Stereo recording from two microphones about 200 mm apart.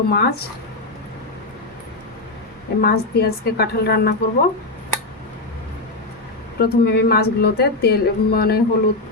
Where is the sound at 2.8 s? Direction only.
50° left (ahead or behind).